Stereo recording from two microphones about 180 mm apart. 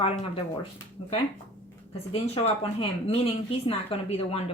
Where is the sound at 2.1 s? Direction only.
35° left (ahead or behind).